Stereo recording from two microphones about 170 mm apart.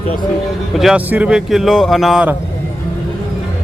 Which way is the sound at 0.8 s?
5° right (ahead or behind).